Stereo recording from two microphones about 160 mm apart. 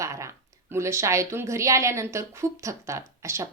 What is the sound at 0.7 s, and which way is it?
A woman's voice, 15° right (ahead or behind).